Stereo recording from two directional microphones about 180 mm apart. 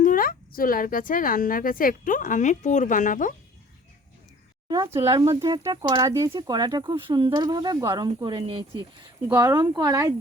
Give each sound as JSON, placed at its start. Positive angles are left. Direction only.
{"t": 0.0, "sound": "a woman's voice", "side_deg": 50}
{"t": 4.7, "sound": "speech", "side_deg": -15}